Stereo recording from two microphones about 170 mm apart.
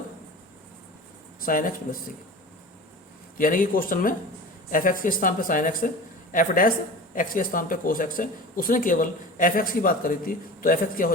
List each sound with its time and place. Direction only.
1.4 s speech: 55° left (ahead or behind)
3.3 s a woman's voice: 55° left (ahead or behind)